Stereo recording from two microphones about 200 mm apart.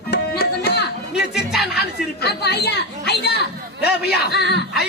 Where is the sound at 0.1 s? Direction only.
55° left (ahead or behind).